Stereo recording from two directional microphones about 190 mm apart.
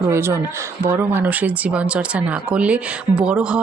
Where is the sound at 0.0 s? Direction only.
15° right (ahead or behind).